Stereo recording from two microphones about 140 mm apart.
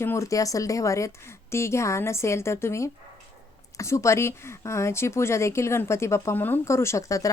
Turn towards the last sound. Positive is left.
turn(degrees=25)  # may be behind; listen again after turning